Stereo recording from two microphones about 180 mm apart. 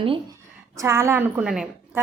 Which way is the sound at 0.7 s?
15° right (ahead or behind).